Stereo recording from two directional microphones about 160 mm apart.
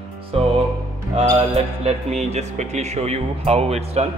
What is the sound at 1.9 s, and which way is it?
Speech, 45° right (ahead or behind).